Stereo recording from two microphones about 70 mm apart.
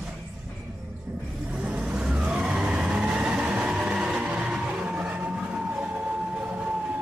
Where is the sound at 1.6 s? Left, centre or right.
Centre.